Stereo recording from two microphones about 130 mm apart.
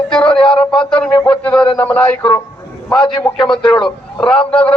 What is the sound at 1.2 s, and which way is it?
A man's voice, 10° left (ahead or behind).